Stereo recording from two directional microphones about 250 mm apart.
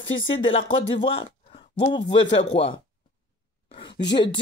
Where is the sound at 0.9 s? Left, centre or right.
Centre.